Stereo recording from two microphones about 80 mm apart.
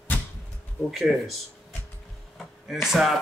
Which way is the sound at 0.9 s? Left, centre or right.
Centre.